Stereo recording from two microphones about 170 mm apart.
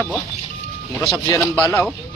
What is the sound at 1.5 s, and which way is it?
Speech, 10° left (ahead or behind).